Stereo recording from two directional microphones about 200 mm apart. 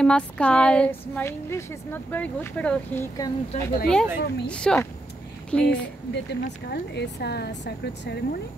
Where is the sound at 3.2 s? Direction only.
20° left (ahead or behind).